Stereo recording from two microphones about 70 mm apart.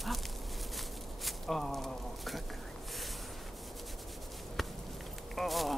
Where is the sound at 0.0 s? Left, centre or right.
Centre.